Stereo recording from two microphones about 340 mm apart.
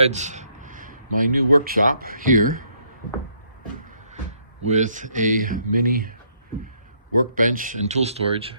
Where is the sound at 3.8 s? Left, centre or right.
Right.